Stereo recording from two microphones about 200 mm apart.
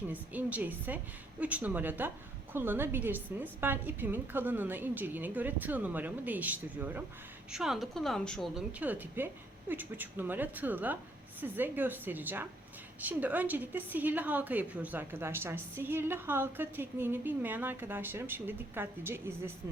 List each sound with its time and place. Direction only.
0.1 s a woman's voice: 10° right (ahead or behind)